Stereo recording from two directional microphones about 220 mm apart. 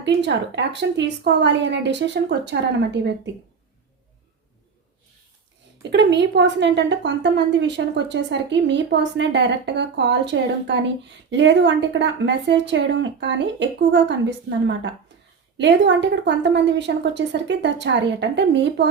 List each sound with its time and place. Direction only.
0.0 s a woman's voice: 55° right (ahead or behind)
5.9 s a woman's voice: 55° right (ahead or behind)